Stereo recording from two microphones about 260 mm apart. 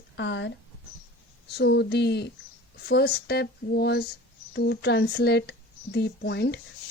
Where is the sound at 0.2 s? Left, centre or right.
Left.